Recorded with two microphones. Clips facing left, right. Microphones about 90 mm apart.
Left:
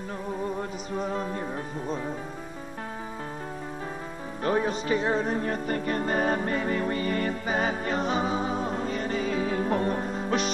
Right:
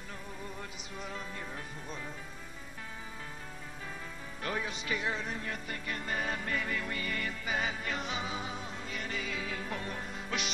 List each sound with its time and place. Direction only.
0.6 s music: 40° left (ahead or behind)
4.4 s music: 35° left (ahead or behind)